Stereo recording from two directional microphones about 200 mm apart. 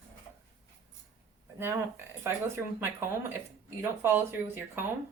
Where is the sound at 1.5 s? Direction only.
10° right (ahead or behind).